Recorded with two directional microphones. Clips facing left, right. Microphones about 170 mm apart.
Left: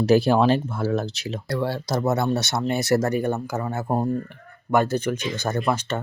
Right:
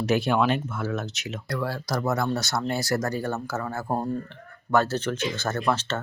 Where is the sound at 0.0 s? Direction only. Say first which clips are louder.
Left 5 dB; 35° left (ahead or behind).